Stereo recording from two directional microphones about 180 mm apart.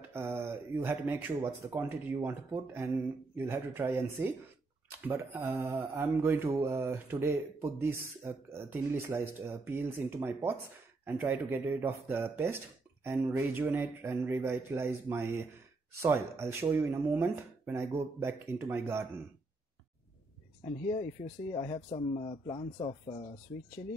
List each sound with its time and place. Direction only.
0.1 s speech: 15° right (ahead or behind)
21.6 s speech: 30° left (ahead or behind)
23.5 s speech: 90° left